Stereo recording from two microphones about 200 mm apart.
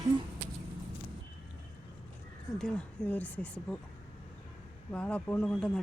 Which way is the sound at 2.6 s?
5° left (ahead or behind).